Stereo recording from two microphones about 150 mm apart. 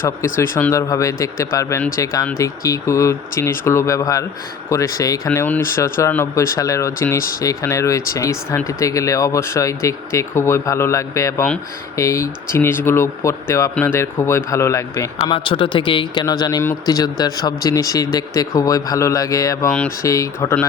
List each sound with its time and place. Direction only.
0.2 s speech: 20° left (ahead or behind)
7.2 s speech: 75° left (ahead or behind)
7.4 s speech: 20° left (ahead or behind)
15.3 s speech: 35° left (ahead or behind); by 20.7 s 20° left (ahead or behind)